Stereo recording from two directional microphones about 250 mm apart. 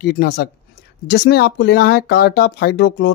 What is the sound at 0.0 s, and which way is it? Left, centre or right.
Speech, left.